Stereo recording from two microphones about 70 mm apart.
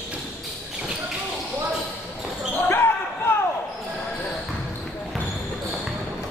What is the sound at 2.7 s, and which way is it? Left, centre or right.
Basketball bounce, left.